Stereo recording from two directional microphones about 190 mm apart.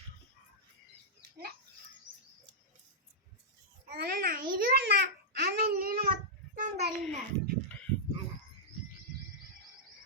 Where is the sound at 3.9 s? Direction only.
55° right (ahead or behind).